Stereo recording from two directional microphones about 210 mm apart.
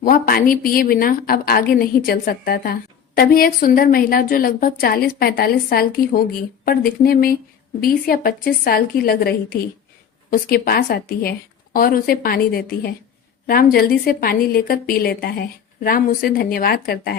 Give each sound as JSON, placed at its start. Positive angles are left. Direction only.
{"t": 0.0, "sound": "a woman's voice", "side_deg": 45}